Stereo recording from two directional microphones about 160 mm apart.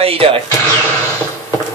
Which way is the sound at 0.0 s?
35° right (ahead or behind).